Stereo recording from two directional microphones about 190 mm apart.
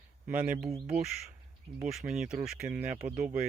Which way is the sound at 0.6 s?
Centre (ahead or behind).